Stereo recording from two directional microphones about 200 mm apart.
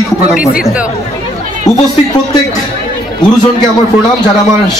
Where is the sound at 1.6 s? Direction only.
20° left (ahead or behind).